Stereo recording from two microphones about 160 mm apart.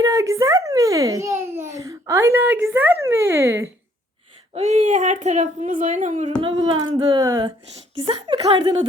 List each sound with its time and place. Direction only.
0.0 s babbling: 20° right (ahead or behind)
4.5 s speech: 45° right (ahead or behind)
6.2 s a sound: 30° right (ahead or behind)
7.8 s speech: 35° right (ahead or behind)